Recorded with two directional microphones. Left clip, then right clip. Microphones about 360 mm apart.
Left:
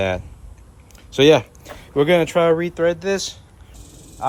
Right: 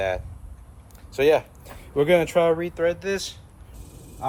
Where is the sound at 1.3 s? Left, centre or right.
Left.